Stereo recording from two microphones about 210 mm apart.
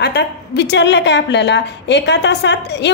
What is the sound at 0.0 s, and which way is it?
A woman's voice, 50° left (ahead or behind).